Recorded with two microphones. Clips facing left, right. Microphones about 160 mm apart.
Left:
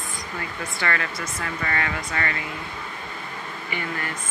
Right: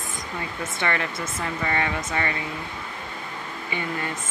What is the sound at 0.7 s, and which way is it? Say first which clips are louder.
Speech: right 1 dB; 20° right (ahead or behind).